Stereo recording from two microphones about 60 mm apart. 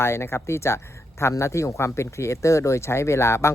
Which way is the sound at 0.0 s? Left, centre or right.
Left.